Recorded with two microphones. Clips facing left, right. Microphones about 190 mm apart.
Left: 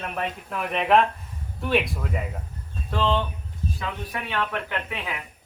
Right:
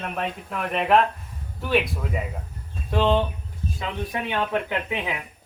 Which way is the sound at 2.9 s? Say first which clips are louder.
Right 4 dB; 20° right (ahead or behind).